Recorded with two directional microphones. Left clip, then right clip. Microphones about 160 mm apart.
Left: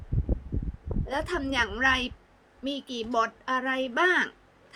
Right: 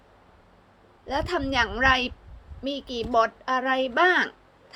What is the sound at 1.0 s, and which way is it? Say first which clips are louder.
Speech: right 3 dB; 25° left (ahead or behind).